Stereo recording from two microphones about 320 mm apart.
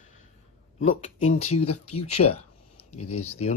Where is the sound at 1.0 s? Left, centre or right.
Left.